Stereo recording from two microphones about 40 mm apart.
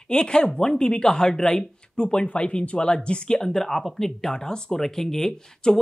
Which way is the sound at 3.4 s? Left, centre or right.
Centre.